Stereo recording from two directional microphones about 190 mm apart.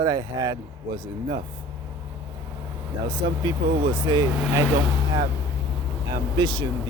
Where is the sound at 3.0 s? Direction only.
20° right (ahead or behind).